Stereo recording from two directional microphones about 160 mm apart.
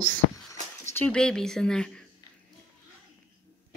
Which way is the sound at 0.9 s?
5° left (ahead or behind).